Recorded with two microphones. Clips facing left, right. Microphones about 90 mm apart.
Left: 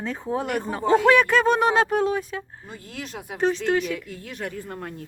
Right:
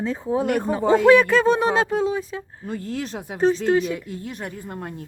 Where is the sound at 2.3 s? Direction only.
20° right (ahead or behind).